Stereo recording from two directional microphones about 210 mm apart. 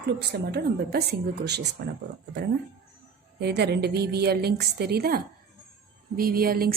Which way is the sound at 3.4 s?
50° right (ahead or behind).